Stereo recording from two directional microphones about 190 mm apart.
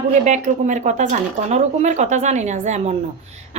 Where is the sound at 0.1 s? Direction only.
40° right (ahead or behind).